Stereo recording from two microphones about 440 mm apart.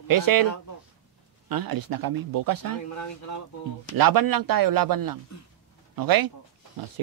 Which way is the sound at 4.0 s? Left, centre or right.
Right.